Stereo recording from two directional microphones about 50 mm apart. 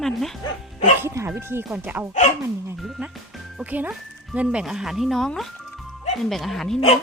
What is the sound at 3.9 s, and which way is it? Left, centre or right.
Speech, right.